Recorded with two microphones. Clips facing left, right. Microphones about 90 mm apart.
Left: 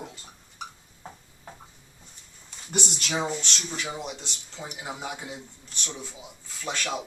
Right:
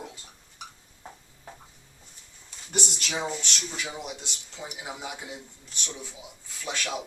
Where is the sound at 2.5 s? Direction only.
Centre (ahead or behind).